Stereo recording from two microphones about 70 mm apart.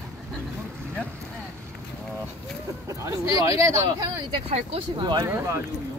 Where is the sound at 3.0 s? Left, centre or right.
Right.